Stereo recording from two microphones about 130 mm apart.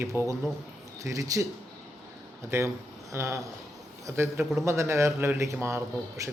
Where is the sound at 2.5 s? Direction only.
20° right (ahead or behind).